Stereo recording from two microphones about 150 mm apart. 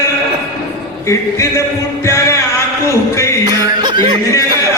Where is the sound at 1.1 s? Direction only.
20° left (ahead or behind).